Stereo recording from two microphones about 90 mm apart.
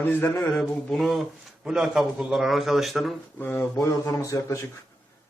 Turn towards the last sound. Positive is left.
turn(degrees=35)  # may be behind; listen again after turning